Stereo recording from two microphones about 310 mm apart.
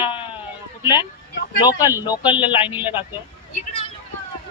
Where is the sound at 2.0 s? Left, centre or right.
Centre.